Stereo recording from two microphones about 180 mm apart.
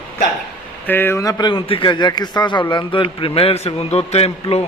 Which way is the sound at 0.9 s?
10° left (ahead or behind).